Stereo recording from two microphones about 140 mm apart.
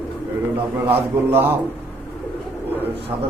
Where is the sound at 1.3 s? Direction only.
15° right (ahead or behind).